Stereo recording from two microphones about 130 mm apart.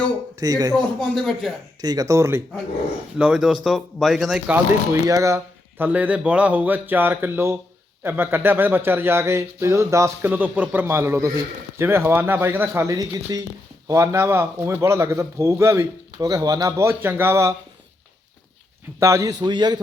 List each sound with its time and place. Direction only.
0.3 s a man's voice: 30° right (ahead or behind)
0.9 s speech: centre (ahead or behind)
1.8 s a man's voice: 30° right (ahead or behind)
3.2 s speech: 5° right (ahead or behind)
5.0 s a man's voice: 25° right (ahead or behind)
18.9 s a man's voice: 20° right (ahead or behind)